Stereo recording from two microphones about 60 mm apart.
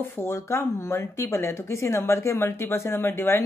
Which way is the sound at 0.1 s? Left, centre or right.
Left.